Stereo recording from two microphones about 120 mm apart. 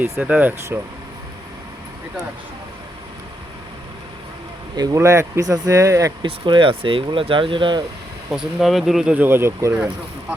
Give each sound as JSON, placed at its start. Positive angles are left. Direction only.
{"t": 0.0, "sound": "speech", "side_deg": -10}
{"t": 4.8, "sound": "speech", "side_deg": -25}
{"t": 6.2, "sound": "speech", "side_deg": -45}
{"t": 8.3, "sound": "speech", "side_deg": -5}
{"t": 9.1, "sound": "speech", "side_deg": -20}